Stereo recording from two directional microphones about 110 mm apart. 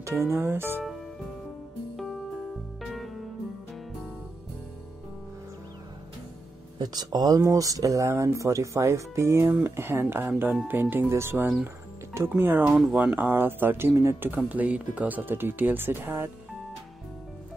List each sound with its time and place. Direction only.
0.0 s speech: 25° right (ahead or behind)
2.8 s music: centre (ahead or behind)
6.8 s speech: 40° right (ahead or behind); by 16.3 s 20° right (ahead or behind)